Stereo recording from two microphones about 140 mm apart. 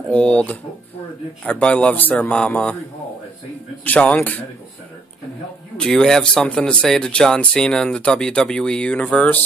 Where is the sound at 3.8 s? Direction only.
10° left (ahead or behind).